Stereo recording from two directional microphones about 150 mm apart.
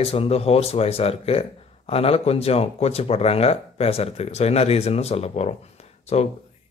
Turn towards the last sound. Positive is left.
turn(degrees=45)  # may be behind; listen again after turning